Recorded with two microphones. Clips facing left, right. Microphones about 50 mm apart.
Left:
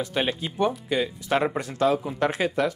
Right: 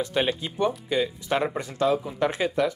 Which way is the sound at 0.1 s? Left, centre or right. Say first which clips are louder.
Right 1 dB; centre.